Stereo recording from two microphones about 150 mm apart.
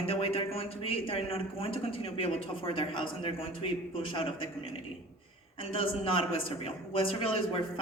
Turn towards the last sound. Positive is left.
turn(degrees=35)  # may be behind; listen again after turning